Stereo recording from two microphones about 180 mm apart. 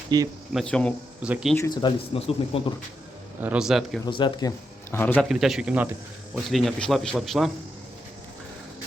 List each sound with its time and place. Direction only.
0.1 s speech: 20° right (ahead or behind)
0.5 s speech: 5° left (ahead or behind)
1.5 s speech: 20° left (ahead or behind)
3.4 s speech: 5° right (ahead or behind)
4.0 s speech: 25° left (ahead or behind)
5.3 s speech: centre (ahead or behind)